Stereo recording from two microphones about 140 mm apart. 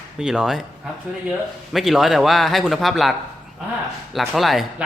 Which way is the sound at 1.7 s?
Centre (ahead or behind).